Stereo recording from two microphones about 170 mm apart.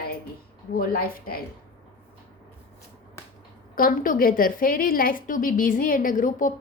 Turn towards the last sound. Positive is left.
turn(degrees=50)  # may be behind; listen again after turning